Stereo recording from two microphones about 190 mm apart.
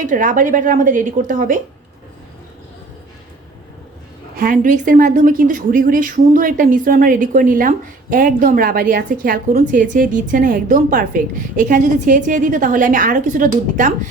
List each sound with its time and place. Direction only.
0.0 s a woman's voice: 45° right (ahead or behind)
4.4 s a woman's voice: 45° right (ahead or behind)